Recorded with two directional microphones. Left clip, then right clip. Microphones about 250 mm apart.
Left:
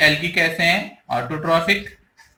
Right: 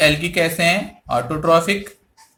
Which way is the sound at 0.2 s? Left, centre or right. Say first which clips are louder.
Even; centre.